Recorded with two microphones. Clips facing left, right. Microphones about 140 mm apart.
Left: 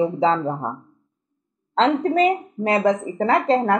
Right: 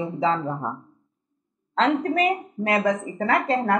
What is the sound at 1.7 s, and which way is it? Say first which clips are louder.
Speech: left 3 dB; 25° left (ahead or behind).